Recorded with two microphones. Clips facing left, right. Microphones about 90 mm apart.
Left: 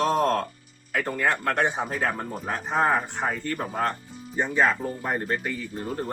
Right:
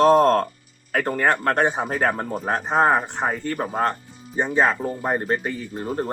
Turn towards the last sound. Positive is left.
turn(degrees=-30)  # may be behind; listen again after turning